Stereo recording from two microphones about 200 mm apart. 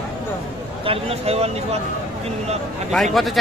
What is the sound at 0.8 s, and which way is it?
Speech, 30° right (ahead or behind).